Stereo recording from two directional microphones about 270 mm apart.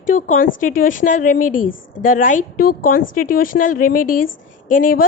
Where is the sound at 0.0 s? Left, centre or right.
Left.